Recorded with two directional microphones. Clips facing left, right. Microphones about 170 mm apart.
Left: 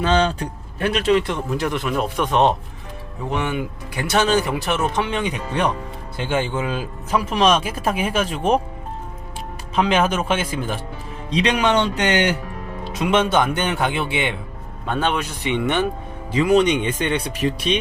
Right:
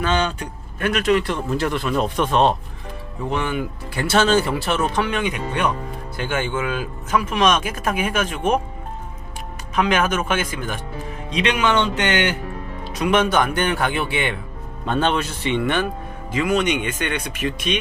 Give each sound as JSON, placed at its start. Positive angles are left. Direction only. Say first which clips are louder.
{"t": 0.0, "sound": "speech", "louder": "left 3 dB", "side_deg": 30}
{"t": 9.7, "sound": "speech", "louder": "left 1 dB", "side_deg": 30}
{"t": 12.8, "sound": "speech", "louder": "even", "side_deg": 25}
{"t": 14.8, "sound": "speech", "louder": "right 2 dB", "side_deg": 10}
{"t": 16.3, "sound": "speech", "louder": "left 4 dB", "side_deg": 35}